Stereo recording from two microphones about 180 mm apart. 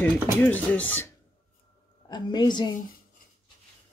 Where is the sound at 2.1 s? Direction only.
25° left (ahead or behind).